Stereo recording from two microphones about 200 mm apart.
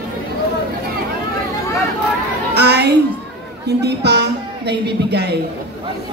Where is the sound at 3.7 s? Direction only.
55° right (ahead or behind).